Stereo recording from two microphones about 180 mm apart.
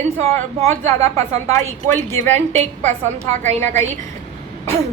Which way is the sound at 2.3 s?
40° right (ahead or behind).